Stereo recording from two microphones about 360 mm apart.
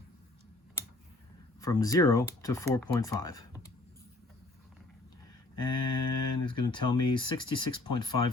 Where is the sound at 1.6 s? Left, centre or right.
Centre.